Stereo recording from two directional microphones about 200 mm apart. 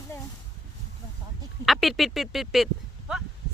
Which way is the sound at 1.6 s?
Centre (ahead or behind).